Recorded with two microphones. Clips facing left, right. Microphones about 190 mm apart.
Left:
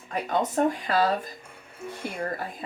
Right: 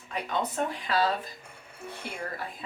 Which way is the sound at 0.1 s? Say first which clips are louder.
Left 5 dB; 45° left (ahead or behind).